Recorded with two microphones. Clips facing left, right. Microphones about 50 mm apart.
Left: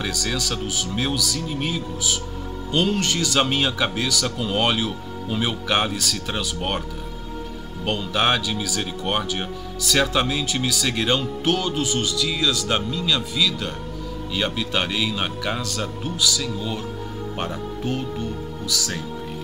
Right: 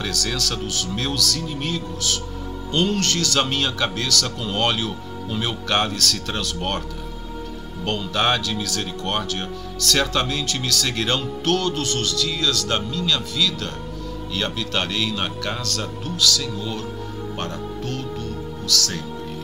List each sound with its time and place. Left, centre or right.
0.0 s speech: centre
7.8 s speech: centre